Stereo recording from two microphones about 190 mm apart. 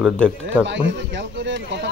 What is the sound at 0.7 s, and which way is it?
Speech, 70° right (ahead or behind).